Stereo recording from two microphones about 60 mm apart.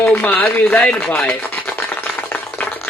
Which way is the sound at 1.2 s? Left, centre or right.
Left.